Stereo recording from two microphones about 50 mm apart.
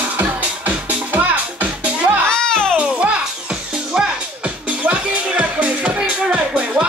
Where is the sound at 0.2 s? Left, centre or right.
Right.